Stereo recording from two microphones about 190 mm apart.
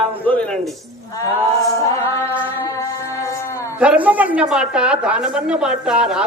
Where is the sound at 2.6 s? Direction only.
15° left (ahead or behind).